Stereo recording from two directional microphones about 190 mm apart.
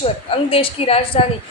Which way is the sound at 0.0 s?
30° left (ahead or behind).